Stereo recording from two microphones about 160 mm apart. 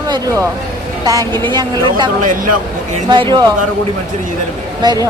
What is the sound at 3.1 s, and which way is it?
Speech, 30° right (ahead or behind).